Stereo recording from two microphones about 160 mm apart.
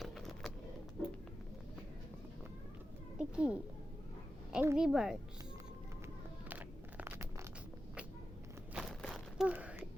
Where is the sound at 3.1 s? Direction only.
5° right (ahead or behind).